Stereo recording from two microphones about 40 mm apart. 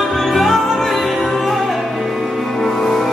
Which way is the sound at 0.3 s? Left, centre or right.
Centre.